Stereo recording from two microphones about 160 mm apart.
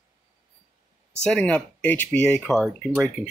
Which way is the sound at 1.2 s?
5° left (ahead or behind).